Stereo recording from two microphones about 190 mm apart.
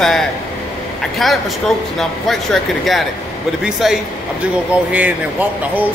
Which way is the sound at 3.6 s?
Centre (ahead or behind).